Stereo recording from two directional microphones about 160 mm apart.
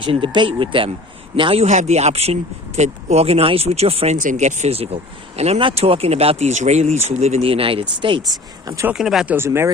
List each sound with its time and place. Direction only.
0.0 s speech: 30° right (ahead or behind)
1.6 s speech: 45° right (ahead or behind); by 8.9 s 20° right (ahead or behind)
8.9 s speech: centre (ahead or behind)
9.3 s speech: 15° right (ahead or behind)